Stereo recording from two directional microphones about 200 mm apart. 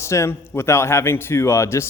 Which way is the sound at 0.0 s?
15° left (ahead or behind).